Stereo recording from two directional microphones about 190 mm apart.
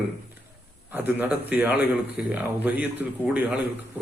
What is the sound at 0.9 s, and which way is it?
Speech, 10° right (ahead or behind).